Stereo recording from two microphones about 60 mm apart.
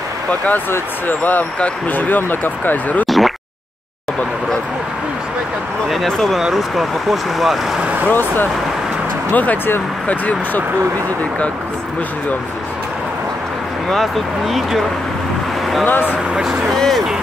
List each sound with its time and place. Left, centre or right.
0.3 s speech: left
3.1 s speech: centre
6.3 s speech: centre
7.8 s vehicle: right
8.1 s speech: left
13.8 s speech: centre
15.8 s speech: left
16.6 s speech: centre